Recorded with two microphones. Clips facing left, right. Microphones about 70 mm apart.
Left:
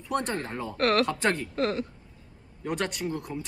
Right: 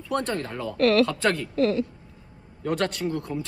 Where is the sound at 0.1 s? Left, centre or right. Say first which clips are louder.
Right 2 dB; left.